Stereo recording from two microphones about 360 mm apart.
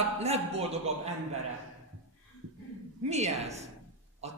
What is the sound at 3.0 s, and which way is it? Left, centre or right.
Speech, centre.